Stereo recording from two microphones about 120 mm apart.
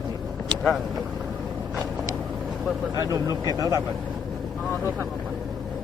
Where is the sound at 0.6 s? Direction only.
Centre (ahead or behind).